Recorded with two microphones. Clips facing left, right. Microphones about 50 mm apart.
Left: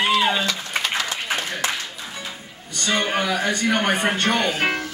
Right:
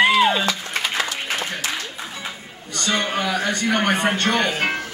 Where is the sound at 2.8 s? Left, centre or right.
Centre.